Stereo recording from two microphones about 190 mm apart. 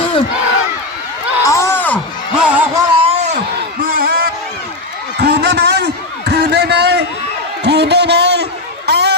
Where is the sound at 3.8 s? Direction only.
50° right (ahead or behind).